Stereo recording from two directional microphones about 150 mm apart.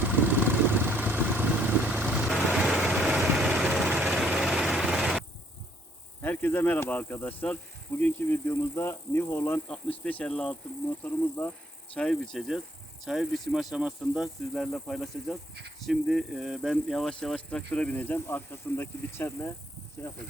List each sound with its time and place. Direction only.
0.0 s vehicle: 10° right (ahead or behind)
6.2 s speech: 10° left (ahead or behind)